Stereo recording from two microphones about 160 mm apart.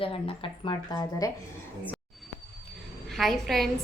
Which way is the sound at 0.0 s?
35° left (ahead or behind).